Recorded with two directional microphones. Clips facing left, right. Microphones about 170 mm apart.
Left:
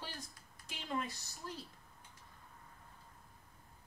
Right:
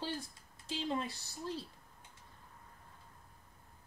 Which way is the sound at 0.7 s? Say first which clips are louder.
Right 4 dB; 30° right (ahead or behind).